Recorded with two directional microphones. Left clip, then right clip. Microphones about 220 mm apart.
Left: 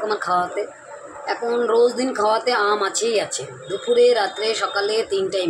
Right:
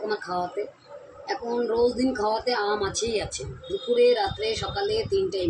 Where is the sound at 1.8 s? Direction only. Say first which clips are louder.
Left 5 dB; 10° right (ahead or behind).